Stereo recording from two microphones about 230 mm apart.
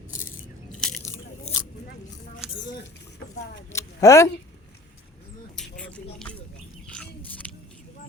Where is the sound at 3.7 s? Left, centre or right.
Centre.